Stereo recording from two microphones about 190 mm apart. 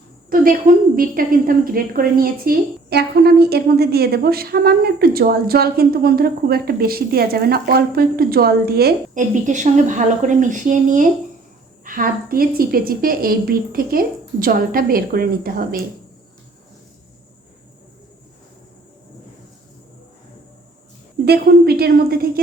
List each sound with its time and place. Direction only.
0.3 s a woman's voice: 45° right (ahead or behind)
21.2 s a woman's voice: 55° right (ahead or behind)